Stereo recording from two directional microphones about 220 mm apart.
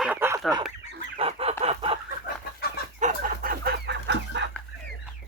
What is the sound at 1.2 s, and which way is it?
Fowl, 25° right (ahead or behind).